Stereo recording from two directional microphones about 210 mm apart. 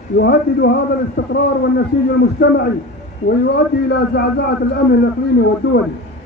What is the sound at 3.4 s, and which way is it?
A man's voice, 50° left (ahead or behind).